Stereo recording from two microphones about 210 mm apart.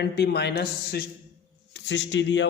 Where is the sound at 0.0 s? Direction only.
55° left (ahead or behind).